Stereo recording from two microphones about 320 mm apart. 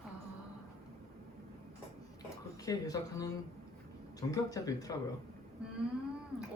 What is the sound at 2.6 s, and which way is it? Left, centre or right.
Speech, centre.